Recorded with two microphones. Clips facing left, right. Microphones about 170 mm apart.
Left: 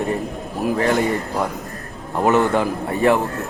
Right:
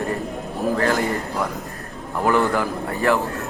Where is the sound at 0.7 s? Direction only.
20° left (ahead or behind).